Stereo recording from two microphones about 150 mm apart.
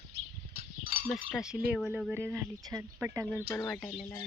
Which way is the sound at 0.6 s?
80° right.